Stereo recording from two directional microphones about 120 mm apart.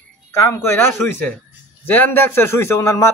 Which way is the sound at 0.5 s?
20° left (ahead or behind).